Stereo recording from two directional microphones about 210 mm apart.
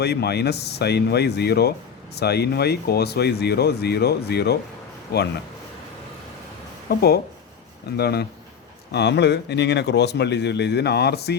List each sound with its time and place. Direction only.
0.0 s a man's voice: 50° left (ahead or behind)
6.9 s a man's voice: 45° left (ahead or behind)